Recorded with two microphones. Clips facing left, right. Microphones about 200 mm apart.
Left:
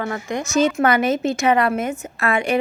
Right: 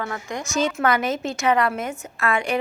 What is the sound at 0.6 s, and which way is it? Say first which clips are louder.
A woman's voice: left 4 dB; 55° left (ahead or behind).